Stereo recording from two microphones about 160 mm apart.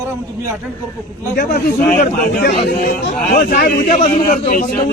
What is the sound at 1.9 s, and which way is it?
Speech, 60° left (ahead or behind).